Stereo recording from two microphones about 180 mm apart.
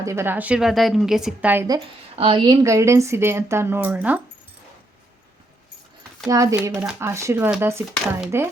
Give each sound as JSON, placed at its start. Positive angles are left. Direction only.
{"t": 0.0, "sound": "a woman's voice", "side_deg": -15}
{"t": 2.1, "sound": "a woman's voice", "side_deg": -30}
{"t": 6.2, "sound": "a woman's voice", "side_deg": -20}
{"t": 6.6, "sound": "a woman's voice", "side_deg": -10}